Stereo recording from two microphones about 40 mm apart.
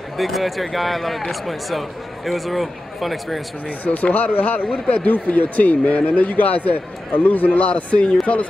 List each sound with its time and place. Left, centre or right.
0.2 s speech: centre
3.8 s speech: left